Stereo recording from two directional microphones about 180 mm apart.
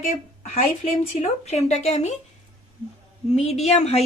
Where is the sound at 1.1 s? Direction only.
35° left (ahead or behind).